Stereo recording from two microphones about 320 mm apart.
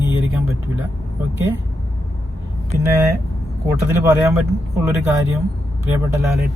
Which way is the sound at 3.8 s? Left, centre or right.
Centre.